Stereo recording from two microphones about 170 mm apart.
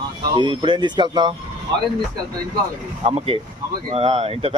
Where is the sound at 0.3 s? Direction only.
30° right (ahead or behind).